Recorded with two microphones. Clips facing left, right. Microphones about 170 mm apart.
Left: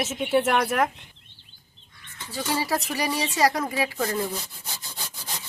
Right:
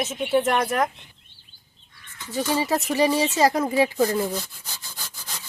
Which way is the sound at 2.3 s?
20° right (ahead or behind).